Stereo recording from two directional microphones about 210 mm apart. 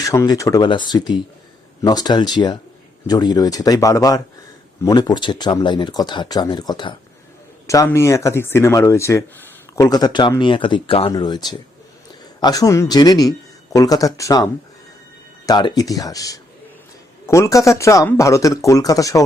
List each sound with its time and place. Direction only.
0.0 s speech: 15° left (ahead or behind)
15.4 s speech: 20° left (ahead or behind)